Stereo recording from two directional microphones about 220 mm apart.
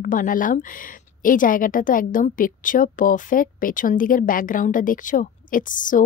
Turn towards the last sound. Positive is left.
turn(degrees=35)  # may be behind; listen again after turning